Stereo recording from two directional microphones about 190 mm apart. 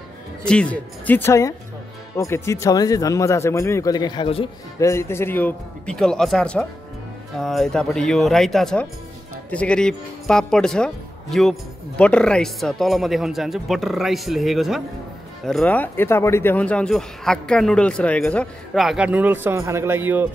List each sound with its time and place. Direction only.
0.5 s speech: 5° left (ahead or behind); by 4.5 s 30° left (ahead or behind)
4.7 s speech: 15° left (ahead or behind); by 20.2 s 10° right (ahead or behind)